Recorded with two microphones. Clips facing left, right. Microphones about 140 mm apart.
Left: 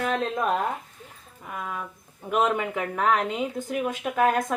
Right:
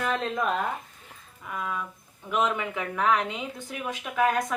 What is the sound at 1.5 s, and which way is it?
Speech, 40° left (ahead or behind).